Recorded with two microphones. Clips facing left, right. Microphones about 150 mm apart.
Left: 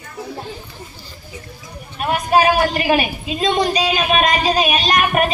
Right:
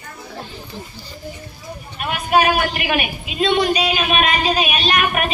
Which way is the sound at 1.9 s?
35° left (ahead or behind).